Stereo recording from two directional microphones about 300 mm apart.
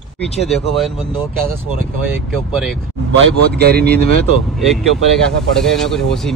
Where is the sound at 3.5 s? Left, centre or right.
Right.